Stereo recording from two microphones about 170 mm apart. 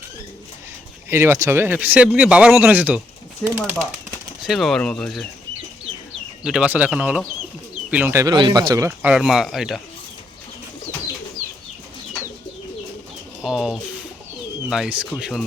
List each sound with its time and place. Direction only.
1.1 s speech: 15° right (ahead or behind)
4.4 s speech: centre (ahead or behind)
6.4 s speech: 5° right (ahead or behind); by 8.9 s 20° right (ahead or behind)
8.9 s speech: 5° right (ahead or behind)
13.4 s speech: 5° right (ahead or behind)